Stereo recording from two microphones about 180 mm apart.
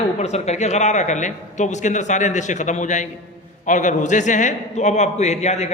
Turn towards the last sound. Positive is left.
turn(degrees=40)  # may be behind; listen again after turning